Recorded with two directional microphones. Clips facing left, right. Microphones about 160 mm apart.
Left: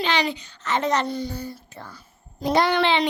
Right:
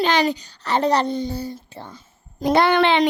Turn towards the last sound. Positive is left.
turn(degrees=-50)  # may be behind; listen again after turning